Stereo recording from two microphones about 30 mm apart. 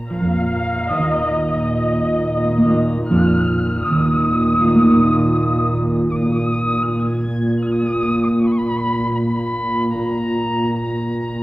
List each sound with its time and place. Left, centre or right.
2.1 s music: left
7.8 s music: left